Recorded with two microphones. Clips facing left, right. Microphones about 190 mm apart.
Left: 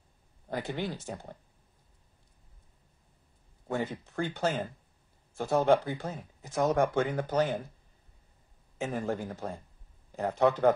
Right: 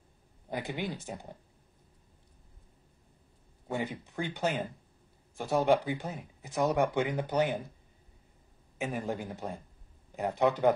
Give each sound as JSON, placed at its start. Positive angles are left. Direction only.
{"t": 0.5, "sound": "speech", "side_deg": -15}
{"t": 3.6, "sound": "speech", "side_deg": -15}
{"t": 8.7, "sound": "speech", "side_deg": -15}